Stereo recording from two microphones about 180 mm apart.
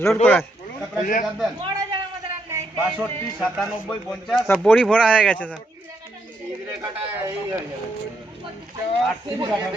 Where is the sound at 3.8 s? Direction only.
Centre (ahead or behind).